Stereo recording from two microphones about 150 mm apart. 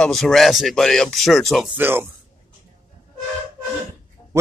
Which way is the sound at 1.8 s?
15° right (ahead or behind).